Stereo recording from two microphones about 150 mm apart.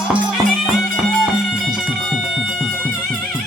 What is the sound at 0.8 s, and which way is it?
Music, centre (ahead or behind).